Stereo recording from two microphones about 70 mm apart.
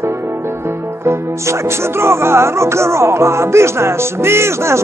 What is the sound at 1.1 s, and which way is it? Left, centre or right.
Music, right.